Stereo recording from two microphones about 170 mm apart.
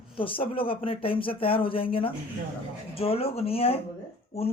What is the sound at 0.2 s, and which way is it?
Speech, 30° left (ahead or behind).